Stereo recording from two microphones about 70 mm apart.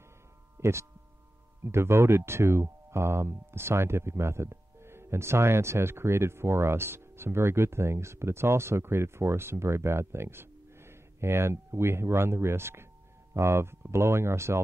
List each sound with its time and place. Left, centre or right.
0.6 s speech: right